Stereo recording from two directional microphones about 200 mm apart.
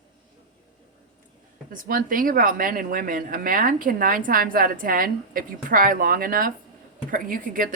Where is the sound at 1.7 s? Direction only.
45° right (ahead or behind).